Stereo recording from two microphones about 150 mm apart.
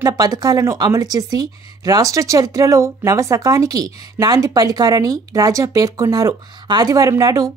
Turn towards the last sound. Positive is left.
turn(degrees=-25)  # may be behind; listen again after turning